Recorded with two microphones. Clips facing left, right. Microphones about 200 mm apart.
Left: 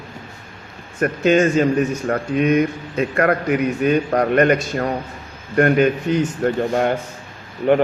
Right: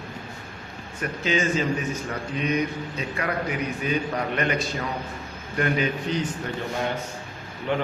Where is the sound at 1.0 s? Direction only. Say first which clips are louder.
Left 10 dB; 65° left (ahead or behind).